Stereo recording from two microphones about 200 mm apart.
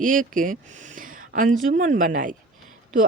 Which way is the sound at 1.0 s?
40° right (ahead or behind).